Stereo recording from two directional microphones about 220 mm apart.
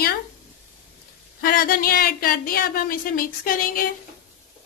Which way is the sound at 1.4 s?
40° left (ahead or behind).